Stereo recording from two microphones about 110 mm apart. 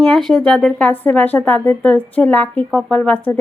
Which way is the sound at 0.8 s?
15° left (ahead or behind).